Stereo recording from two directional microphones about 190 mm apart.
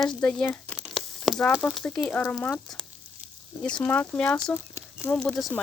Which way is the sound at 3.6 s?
5° left (ahead or behind).